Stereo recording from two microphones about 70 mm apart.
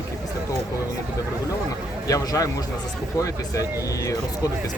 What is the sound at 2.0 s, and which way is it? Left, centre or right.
A man's voice, left.